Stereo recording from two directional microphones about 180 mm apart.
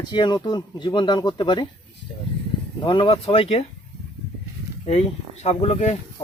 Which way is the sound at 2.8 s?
25° left (ahead or behind).